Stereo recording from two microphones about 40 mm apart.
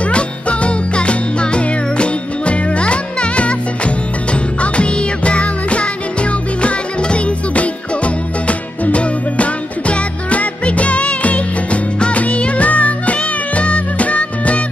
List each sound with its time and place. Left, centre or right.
0.0 s music: left